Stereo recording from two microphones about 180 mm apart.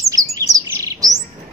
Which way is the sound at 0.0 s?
20° right (ahead or behind).